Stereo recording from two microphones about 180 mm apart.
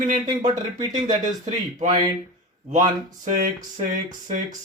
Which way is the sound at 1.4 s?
40° right (ahead or behind).